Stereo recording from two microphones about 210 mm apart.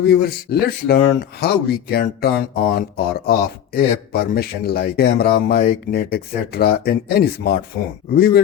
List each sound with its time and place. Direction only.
0.1 s speech: 50° left (ahead or behind)